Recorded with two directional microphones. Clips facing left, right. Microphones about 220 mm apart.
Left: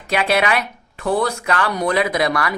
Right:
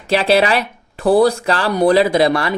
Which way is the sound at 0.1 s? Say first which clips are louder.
Right 5 dB; 30° right (ahead or behind).